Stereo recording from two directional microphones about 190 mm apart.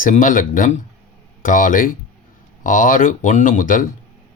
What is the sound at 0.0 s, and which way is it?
Speech, 45° left (ahead or behind).